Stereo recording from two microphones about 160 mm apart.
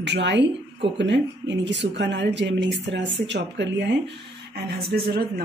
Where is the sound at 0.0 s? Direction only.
90° right.